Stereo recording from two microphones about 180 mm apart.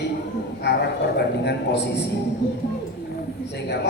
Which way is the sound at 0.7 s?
70° left (ahead or behind).